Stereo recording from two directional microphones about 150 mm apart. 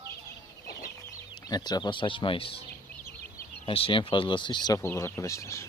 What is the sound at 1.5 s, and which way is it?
Speech, 25° left (ahead or behind).